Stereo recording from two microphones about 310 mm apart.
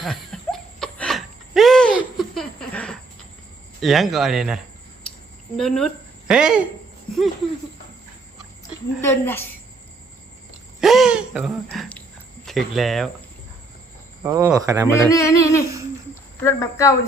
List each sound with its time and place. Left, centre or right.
0.0 s a sound: centre
3.8 s a woman's voice: centre
9.0 s speech: centre
10.8 s a sound: centre
12.5 s speech: centre
14.3 s speech: centre
14.8 s speech: centre